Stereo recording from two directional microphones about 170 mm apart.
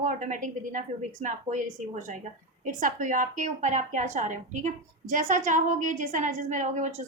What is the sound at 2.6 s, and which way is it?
A woman's voice, 50° right (ahead or behind).